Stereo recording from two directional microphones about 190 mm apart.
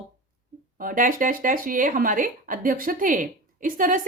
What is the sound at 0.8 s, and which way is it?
A woman's voice, 45° right (ahead or behind).